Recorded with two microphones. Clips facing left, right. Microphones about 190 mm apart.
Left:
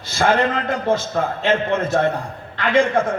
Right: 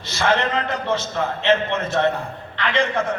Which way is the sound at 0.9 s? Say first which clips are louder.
Left 3 dB; 45° left (ahead or behind).